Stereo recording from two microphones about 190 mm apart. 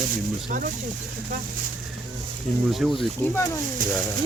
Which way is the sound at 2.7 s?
Centre (ahead or behind).